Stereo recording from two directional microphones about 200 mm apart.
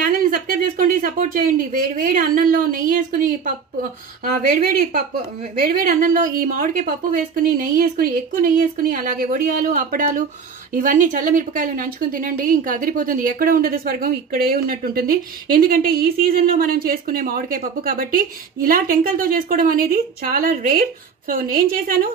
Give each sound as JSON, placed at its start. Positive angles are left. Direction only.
{"t": 0.0, "sound": "a woman's voice", "side_deg": -45}